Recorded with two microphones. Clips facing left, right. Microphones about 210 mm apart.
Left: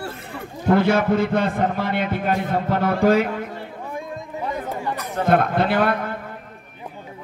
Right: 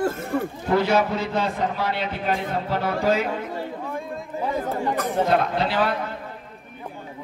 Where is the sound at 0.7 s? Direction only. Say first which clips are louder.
Left 4 dB; 55° left (ahead or behind).